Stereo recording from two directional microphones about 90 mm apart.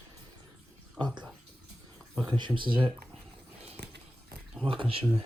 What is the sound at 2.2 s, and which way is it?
Speech, 60° right (ahead or behind).